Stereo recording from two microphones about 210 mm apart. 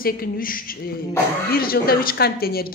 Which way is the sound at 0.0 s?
45° left (ahead or behind).